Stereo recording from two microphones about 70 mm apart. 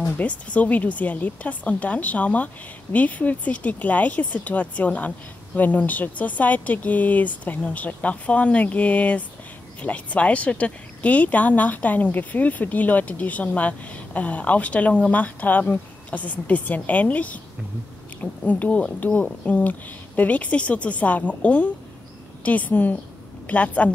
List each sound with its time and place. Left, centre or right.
0.2 s speech: centre
18.4 s a woman's voice: left